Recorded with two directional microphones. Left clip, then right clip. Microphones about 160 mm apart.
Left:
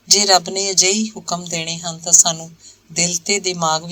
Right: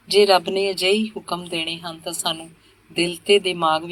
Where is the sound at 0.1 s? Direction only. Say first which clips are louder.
Left 1 dB; 30° left (ahead or behind).